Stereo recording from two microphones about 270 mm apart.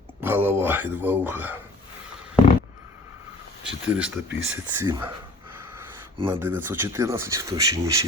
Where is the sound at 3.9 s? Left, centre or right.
Centre.